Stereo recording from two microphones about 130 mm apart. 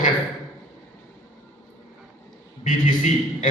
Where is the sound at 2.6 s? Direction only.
80° left.